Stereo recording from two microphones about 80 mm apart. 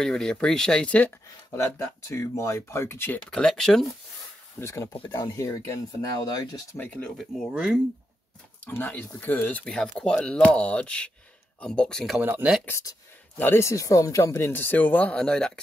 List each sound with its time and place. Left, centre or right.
0.0 s speech: centre
1.5 s speech: left
3.3 s speech: centre
4.6 s speech: left
5.0 s speech: left
6.1 s speech: left
6.8 s speech: centre
7.5 s speech: centre
8.6 s speech: left
9.7 s speech: centre
12.2 s speech: right
13.4 s speech: left; by 15.6 s centre